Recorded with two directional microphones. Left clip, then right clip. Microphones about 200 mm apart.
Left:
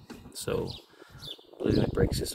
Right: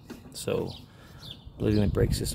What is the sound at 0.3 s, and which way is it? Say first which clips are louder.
Speech: right 2 dB; 10° right (ahead or behind).